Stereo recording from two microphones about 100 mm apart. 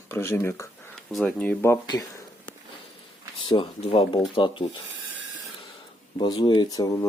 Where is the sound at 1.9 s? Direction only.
40° left (ahead or behind).